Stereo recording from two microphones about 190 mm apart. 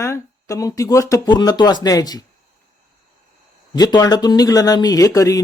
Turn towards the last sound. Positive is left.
turn(degrees=15)  # may be behind; listen again after turning